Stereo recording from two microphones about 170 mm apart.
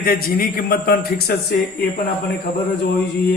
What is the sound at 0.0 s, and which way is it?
A man's voice, 60° left (ahead or behind).